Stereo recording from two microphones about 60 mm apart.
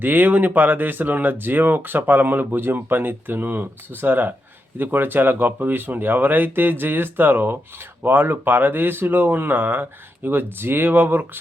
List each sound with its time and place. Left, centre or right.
0.0 s speech: right